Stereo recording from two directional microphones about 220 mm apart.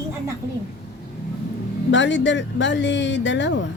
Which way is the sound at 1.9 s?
55° left (ahead or behind).